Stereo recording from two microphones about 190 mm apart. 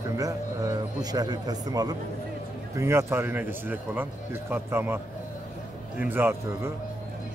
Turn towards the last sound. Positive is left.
turn(degrees=-10)  # may be behind; listen again after turning